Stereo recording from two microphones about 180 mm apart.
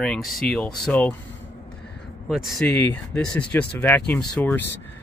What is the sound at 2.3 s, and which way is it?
Speech, centre (ahead or behind).